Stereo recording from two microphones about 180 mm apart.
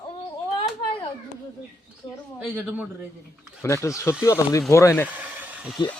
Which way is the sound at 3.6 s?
15° left (ahead or behind).